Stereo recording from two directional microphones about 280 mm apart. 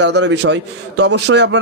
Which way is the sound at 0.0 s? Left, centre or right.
Right.